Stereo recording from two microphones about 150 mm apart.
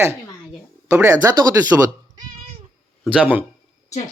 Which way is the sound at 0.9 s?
20° right (ahead or behind).